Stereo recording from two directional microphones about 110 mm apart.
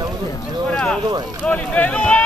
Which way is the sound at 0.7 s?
10° left (ahead or behind).